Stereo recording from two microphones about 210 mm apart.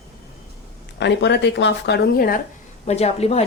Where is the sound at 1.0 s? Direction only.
55° left (ahead or behind).